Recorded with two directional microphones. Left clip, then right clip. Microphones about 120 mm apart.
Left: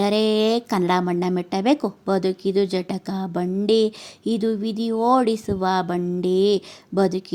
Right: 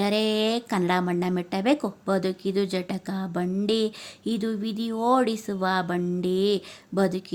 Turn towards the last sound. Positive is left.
turn(degrees=25)  # may be behind; listen again after turning